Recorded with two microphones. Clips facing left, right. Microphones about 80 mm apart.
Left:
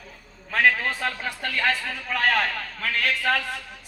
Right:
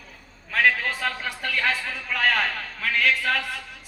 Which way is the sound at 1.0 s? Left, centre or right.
Left.